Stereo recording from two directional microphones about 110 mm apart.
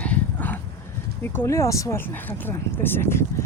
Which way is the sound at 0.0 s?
15° left (ahead or behind).